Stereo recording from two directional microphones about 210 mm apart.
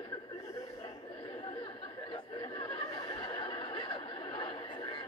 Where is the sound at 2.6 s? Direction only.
25° left (ahead or behind).